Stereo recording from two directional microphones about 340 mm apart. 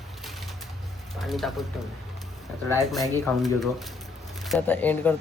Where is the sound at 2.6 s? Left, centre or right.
Centre.